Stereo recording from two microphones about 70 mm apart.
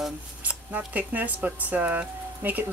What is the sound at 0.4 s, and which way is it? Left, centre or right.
Speech, right.